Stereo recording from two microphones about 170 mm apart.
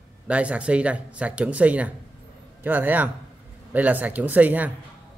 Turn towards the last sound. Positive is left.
turn(degrees=-10)  # may be behind; listen again after turning